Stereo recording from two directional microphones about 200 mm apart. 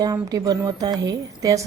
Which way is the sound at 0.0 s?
20° right (ahead or behind).